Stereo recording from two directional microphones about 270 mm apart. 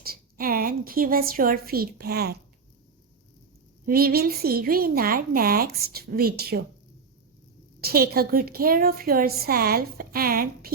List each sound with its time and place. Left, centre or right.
0.0 s a woman's voice: right
3.8 s a woman's voice: right
7.8 s a woman's voice: right